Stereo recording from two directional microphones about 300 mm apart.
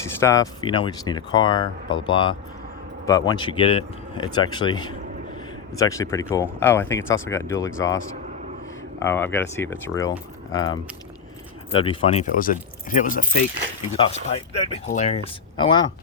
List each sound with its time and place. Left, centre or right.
0.2 s speech: centre
9.0 s speech: centre